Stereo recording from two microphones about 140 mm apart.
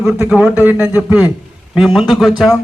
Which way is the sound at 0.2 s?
10° right (ahead or behind).